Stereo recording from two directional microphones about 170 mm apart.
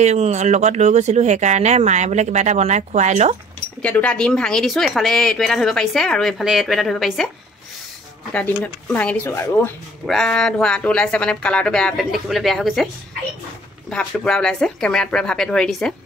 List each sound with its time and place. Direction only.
0.0 s speech: 40° right (ahead or behind)
3.8 s a woman's voice: 10° left (ahead or behind)
8.3 s a woman's voice: 10° left (ahead or behind)
13.8 s a woman's voice: 5° left (ahead or behind)